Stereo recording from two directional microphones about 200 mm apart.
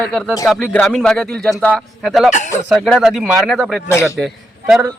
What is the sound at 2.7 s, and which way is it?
A man's voice, 5° left (ahead or behind).